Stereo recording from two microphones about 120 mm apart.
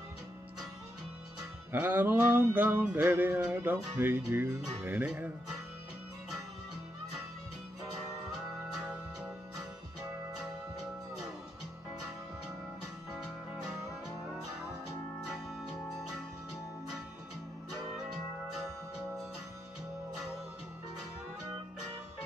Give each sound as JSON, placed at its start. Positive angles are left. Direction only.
{"t": 1.7, "sound": "music", "side_deg": -15}